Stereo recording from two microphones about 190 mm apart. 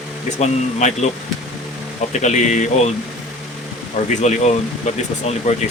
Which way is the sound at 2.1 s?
40° left (ahead or behind).